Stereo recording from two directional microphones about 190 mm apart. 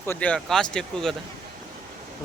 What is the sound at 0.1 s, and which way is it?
A man's voice, 5° left (ahead or behind).